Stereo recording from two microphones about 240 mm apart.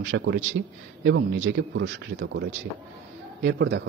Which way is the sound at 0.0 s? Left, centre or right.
Right.